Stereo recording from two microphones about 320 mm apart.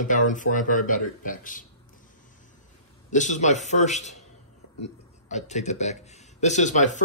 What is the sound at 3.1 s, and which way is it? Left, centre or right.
Speech, left.